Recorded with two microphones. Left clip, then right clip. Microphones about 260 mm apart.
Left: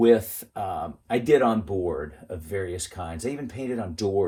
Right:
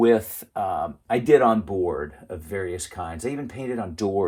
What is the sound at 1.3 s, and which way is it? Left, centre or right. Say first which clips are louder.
Speech: right 3 dB; right.